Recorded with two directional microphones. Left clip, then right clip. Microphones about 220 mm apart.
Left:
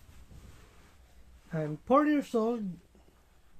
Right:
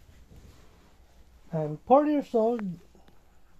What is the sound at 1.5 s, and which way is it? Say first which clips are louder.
Speech: right 5 dB; 10° left (ahead or behind).